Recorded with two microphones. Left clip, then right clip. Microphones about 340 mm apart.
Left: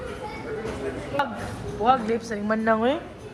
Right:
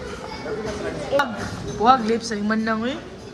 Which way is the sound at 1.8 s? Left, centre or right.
Centre.